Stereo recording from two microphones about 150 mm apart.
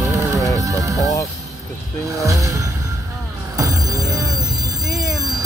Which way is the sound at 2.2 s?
20° right (ahead or behind).